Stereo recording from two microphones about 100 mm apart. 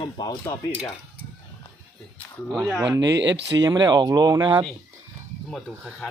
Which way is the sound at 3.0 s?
40° right (ahead or behind).